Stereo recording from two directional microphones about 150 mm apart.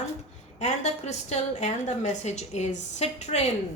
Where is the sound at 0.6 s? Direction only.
50° left (ahead or behind).